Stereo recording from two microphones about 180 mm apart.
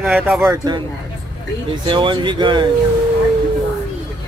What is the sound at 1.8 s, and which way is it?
Speech, 25° right (ahead or behind).